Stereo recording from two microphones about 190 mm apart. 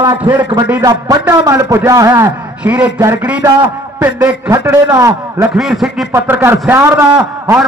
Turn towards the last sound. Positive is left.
turn(degrees=-10)  # may be behind; listen again after turning